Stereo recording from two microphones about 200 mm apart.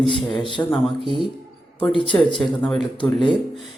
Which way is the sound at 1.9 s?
25° left (ahead or behind).